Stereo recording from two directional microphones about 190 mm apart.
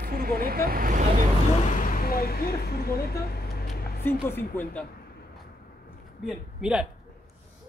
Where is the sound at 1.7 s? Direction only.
45° left (ahead or behind).